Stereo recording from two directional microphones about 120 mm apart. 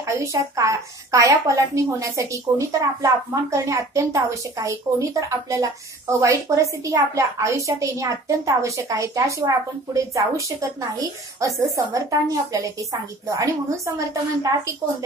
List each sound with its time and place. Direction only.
0.0 s speech: 25° right (ahead or behind)